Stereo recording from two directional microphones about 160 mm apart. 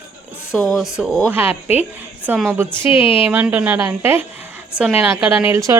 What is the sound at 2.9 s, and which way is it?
Speech, 35° left (ahead or behind).